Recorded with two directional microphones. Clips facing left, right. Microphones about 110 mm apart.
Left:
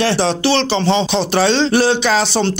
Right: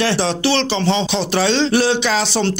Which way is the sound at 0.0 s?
35° left (ahead or behind).